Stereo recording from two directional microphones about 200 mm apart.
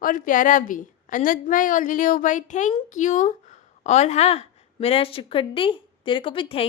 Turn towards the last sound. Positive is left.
turn(degrees=25)  # may be behind; listen again after turning